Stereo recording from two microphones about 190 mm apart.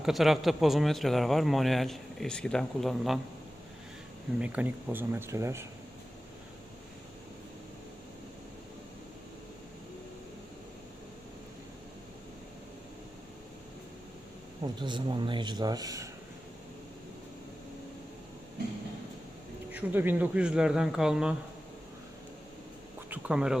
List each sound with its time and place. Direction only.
0.0 s speech: centre (ahead or behind)
4.4 s speech: 5° right (ahead or behind)
14.6 s speech: 25° right (ahead or behind)
19.7 s speech: 10° right (ahead or behind)
23.0 s speech: 10° right (ahead or behind)